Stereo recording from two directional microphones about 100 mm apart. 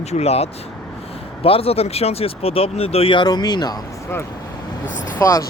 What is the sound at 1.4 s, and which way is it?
Speech, 75° left (ahead or behind).